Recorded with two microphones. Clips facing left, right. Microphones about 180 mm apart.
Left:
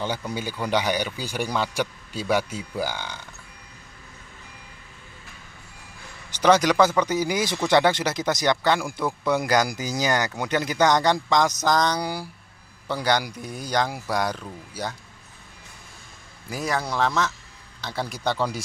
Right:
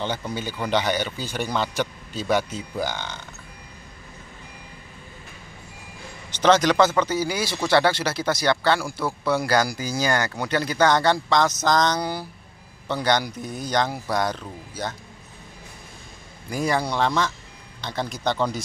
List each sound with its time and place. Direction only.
0.3 s speech: 10° left (ahead or behind)
6.3 s speech: 10° left (ahead or behind)
16.4 s speech: centre (ahead or behind)